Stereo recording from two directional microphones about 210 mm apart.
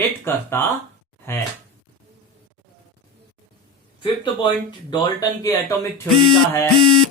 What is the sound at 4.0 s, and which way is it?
Speech, 20° left (ahead or behind).